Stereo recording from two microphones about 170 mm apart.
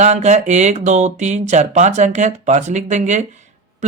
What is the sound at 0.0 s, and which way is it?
Speech, 40° right (ahead or behind).